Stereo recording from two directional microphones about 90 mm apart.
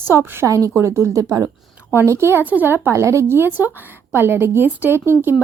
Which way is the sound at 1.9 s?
30° right (ahead or behind).